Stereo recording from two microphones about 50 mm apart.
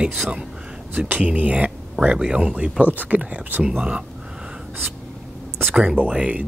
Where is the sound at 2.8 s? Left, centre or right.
Right.